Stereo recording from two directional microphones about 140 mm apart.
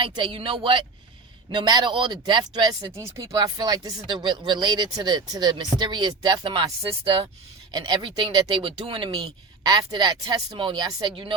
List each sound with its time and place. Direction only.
0.0 s speech: 40° right (ahead or behind)
7.7 s speech: 30° right (ahead or behind)